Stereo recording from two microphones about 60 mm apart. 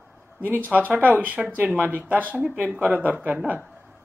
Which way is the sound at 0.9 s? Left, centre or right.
Right.